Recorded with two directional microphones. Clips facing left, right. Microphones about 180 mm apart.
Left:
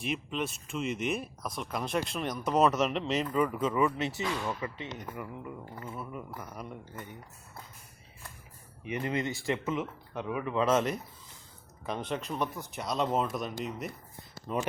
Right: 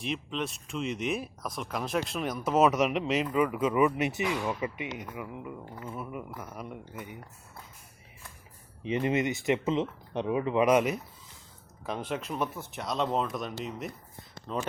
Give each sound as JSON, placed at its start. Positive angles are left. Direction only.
{"t": 0.0, "sound": "speech", "side_deg": 5}
{"t": 5.0, "sound": "speech", "side_deg": 0}
{"t": 8.8, "sound": "speech", "side_deg": -25}
{"t": 14.3, "sound": "a sound", "side_deg": 10}